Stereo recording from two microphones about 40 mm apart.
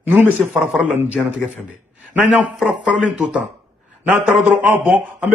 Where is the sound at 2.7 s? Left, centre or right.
Right.